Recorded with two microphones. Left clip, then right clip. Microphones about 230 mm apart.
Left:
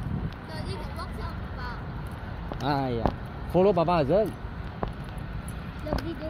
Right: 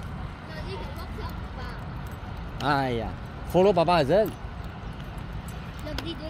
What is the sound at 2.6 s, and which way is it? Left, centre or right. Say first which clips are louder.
Speech: right 2 dB; centre.